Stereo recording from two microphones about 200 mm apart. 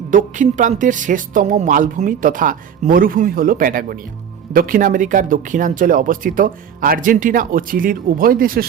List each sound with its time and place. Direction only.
0.1 s speech: 40° right (ahead or behind)